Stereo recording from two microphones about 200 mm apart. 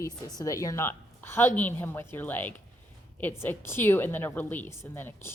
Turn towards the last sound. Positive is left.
turn(degrees=10)  # may be behind; listen again after turning